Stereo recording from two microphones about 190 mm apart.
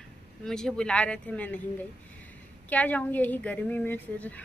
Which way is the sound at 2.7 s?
5° left (ahead or behind).